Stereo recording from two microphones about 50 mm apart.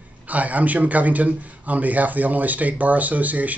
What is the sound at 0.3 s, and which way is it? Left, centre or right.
Speech, right.